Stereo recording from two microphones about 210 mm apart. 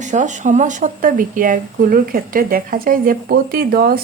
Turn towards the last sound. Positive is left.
turn(degrees=-45)  # may be behind; listen again after turning